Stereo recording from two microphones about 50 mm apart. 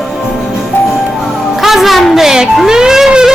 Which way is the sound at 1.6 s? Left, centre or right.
Centre.